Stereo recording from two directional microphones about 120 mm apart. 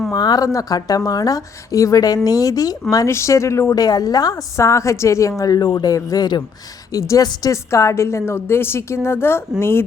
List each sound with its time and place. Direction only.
0.1 s a woman's voice: 30° left (ahead or behind)